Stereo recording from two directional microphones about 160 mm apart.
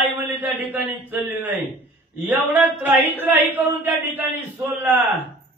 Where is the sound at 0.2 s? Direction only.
10° right (ahead or behind).